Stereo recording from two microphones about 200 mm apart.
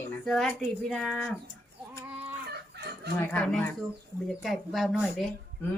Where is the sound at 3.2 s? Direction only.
5° left (ahead or behind).